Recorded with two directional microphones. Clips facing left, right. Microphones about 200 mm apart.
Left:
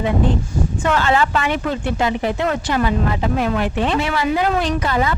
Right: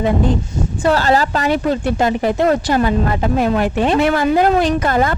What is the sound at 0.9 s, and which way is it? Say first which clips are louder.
A woman's voice: right 4 dB; 35° right (ahead or behind).